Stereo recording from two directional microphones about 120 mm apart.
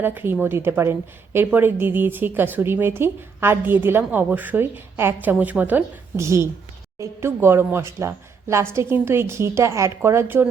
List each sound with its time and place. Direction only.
0.0 s a woman's voice: 15° right (ahead or behind)